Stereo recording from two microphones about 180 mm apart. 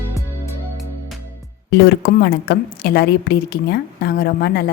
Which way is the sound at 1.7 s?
60° left (ahead or behind).